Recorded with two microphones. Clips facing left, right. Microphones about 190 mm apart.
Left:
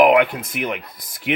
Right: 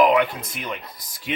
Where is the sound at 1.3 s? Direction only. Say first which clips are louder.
Left 6 dB; 70° left (ahead or behind).